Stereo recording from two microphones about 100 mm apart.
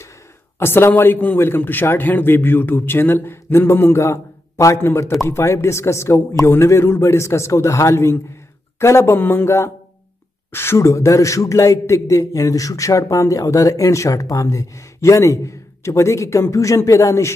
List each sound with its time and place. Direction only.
0.6 s a man's voice: 25° left (ahead or behind)